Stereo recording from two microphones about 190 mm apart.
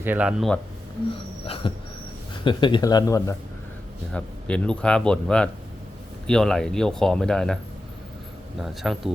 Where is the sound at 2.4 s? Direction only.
25° left (ahead or behind).